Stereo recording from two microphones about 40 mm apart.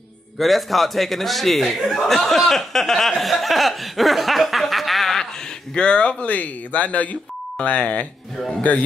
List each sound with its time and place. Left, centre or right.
0.4 s speech: centre
5.8 s speech: left
6.2 s speech: left